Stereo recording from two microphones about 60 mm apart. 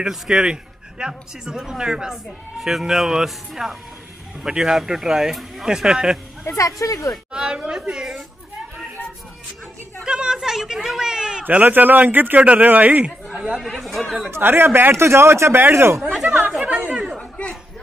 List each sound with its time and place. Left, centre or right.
0.0 s a man's voice: centre
6.4 s speech: left
7.3 s a man's voice: centre
10.0 s a sound: centre
11.4 s speech: right
13.7 s chatter: centre
14.3 s speech: right
16.6 s chatter: right
17.2 s chatter: left